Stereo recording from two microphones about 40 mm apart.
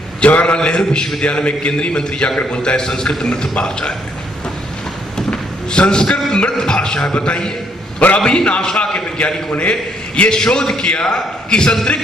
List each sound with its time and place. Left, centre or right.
0.2 s a man's voice: left
0.6 s a man's voice: left
5.1 s a sound: left
6.5 s a man's voice: centre